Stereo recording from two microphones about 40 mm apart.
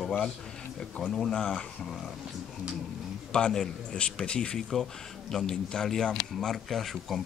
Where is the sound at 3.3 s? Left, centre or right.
Centre.